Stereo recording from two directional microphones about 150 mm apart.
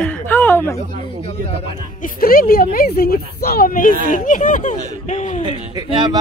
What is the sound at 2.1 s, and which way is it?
Speech, 75° left (ahead or behind).